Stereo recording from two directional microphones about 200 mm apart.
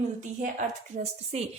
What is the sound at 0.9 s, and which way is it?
Speech, 30° right (ahead or behind).